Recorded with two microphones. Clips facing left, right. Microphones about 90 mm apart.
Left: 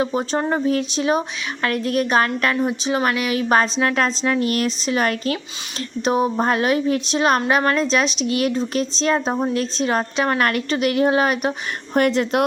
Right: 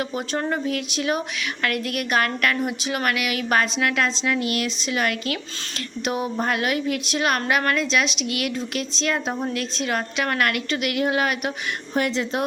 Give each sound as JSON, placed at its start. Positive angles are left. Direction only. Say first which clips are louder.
{"t": 0.0, "sound": "a woman's voice", "louder": "left 5 dB", "side_deg": 30}
{"t": 11.9, "sound": "speech", "louder": "left 6 dB", "side_deg": 55}